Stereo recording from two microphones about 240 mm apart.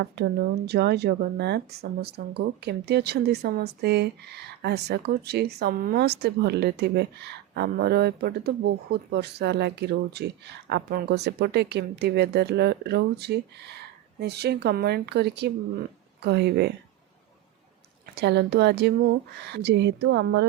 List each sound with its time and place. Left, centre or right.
0.0 s speech: right
18.1 s speech: right